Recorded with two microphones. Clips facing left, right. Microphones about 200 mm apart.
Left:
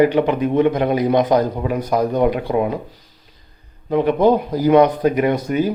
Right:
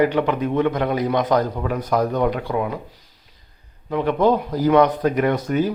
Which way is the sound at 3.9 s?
15° left (ahead or behind).